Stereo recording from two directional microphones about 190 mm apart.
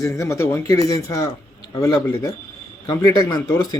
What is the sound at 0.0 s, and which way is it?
Speech, 15° left (ahead or behind).